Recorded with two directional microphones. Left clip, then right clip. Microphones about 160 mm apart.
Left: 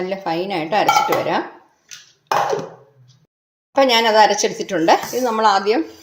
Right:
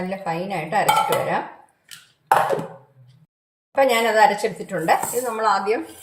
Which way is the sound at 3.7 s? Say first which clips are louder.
Left 4 dB; 55° left (ahead or behind).